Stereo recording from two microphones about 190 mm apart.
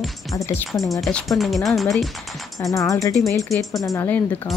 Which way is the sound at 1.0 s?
Centre (ahead or behind).